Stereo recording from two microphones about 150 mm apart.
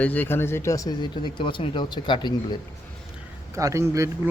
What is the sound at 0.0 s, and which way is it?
Speech, 10° left (ahead or behind).